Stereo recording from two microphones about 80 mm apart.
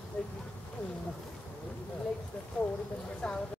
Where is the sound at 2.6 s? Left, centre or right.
Left.